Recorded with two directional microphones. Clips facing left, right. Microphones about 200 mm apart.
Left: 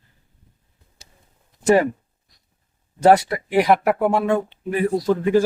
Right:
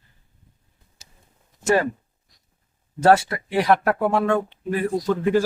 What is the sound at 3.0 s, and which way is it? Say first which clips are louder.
Speech: left 2 dB; 15° left (ahead or behind).